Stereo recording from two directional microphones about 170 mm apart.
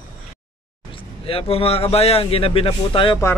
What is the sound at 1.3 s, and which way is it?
A man's voice, 35° left (ahead or behind).